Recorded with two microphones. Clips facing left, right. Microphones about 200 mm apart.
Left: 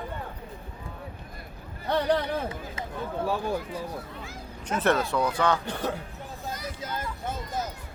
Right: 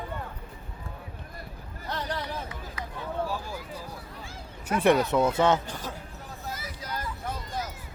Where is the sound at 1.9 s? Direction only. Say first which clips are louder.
Left 9 dB; 60° left (ahead or behind).